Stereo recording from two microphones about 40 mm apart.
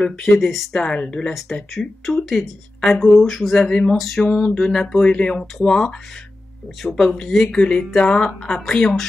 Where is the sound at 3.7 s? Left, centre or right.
Centre.